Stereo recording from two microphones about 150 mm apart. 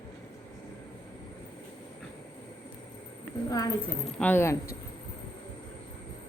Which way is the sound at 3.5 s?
25° left (ahead or behind).